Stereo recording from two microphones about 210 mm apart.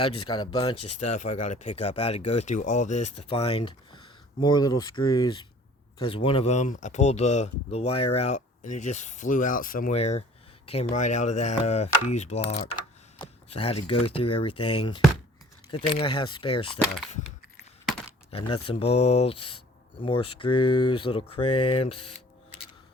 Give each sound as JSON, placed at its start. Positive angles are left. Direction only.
{"t": 0.3, "sound": "speech", "side_deg": 20}
{"t": 1.0, "sound": "speech", "side_deg": 35}
{"t": 15.7, "sound": "speech", "side_deg": 25}
{"t": 18.3, "sound": "speech", "side_deg": 25}